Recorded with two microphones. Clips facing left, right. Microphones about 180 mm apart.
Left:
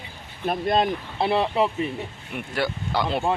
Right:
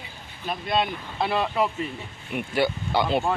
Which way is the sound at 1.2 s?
25° left (ahead or behind).